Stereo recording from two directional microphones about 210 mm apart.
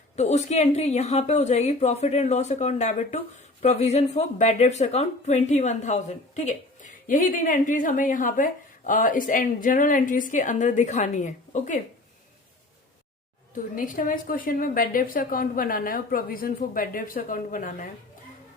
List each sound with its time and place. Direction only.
0.2 s a woman's voice: 35° left (ahead or behind)
13.7 s a woman's voice: 40° left (ahead or behind)